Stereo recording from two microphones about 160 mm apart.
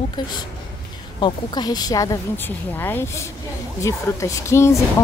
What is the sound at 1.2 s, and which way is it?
A woman's voice, 25° left (ahead or behind).